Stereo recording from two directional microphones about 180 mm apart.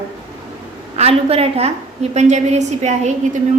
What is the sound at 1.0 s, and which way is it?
A woman's voice, 35° right (ahead or behind).